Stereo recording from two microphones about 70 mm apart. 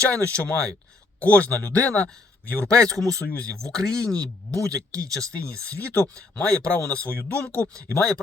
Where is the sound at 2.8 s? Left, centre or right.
Centre.